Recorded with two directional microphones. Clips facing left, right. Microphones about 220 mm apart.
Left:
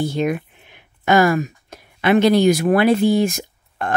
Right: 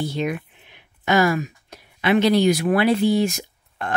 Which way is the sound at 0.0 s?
45° left (ahead or behind).